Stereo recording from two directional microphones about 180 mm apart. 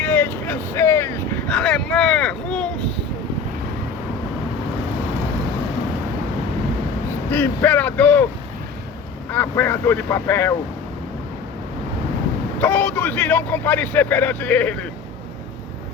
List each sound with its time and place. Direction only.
0.0 s vehicle: 10° left (ahead or behind)
7.3 s a man's voice: 10° left (ahead or behind)
9.3 s a man's voice: 10° left (ahead or behind)
12.5 s a man's voice: 10° left (ahead or behind)